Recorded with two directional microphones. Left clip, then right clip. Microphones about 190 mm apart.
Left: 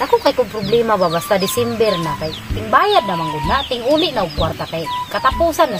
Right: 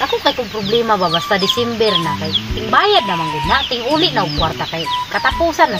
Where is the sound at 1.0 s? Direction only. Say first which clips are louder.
Right 2 dB; 30° left (ahead or behind).